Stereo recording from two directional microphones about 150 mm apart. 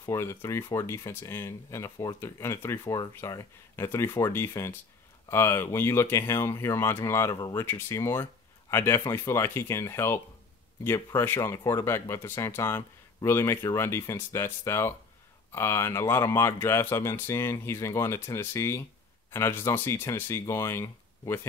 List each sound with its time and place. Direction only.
0.0 s speech: 20° left (ahead or behind)